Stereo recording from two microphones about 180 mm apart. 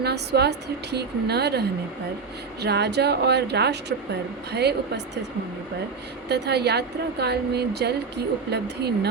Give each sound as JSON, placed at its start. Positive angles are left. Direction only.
{"t": 0.0, "sound": "a woman's voice", "side_deg": -65}
{"t": 6.2, "sound": "a woman's voice", "side_deg": -65}